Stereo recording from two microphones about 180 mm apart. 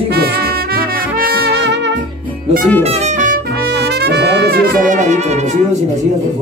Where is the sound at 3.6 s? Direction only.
65° right (ahead or behind).